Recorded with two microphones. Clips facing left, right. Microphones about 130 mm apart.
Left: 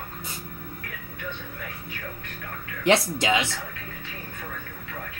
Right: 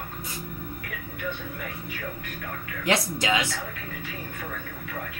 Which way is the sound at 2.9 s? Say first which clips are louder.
Left 4 dB; 25° left (ahead or behind).